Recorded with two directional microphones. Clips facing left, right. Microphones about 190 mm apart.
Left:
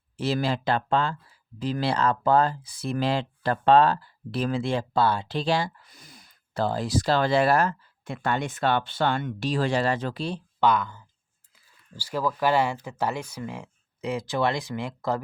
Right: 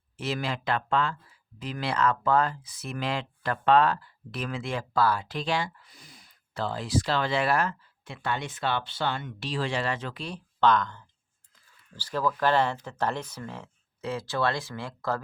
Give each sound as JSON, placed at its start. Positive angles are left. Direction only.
{"t": 0.2, "sound": "speech", "side_deg": 35}
{"t": 10.6, "sound": "speech", "side_deg": 10}